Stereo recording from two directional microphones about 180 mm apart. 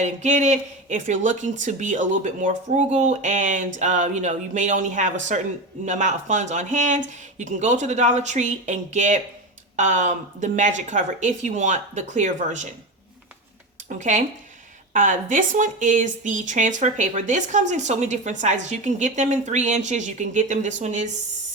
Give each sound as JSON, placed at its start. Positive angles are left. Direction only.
{"t": 0.0, "sound": "a woman's voice", "side_deg": -40}
{"t": 13.8, "sound": "a woman's voice", "side_deg": -45}